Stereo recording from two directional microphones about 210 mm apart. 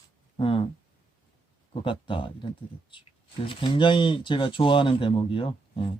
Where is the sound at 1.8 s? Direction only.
25° left (ahead or behind).